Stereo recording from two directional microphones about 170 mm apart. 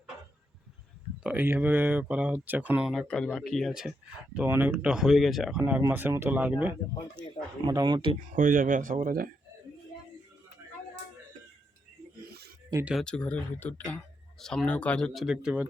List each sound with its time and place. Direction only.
1.2 s speech: 10° right (ahead or behind)
2.9 s speech: 5° left (ahead or behind)
7.6 s speech: 25° right (ahead or behind)
8.4 s speech: 50° right (ahead or behind)
12.3 s a sound: 70° right (ahead or behind)
12.8 s speech: centre (ahead or behind)